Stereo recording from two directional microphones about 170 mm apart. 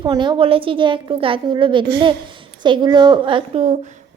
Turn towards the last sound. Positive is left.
turn(degrees=-35)  # may be behind; listen again after turning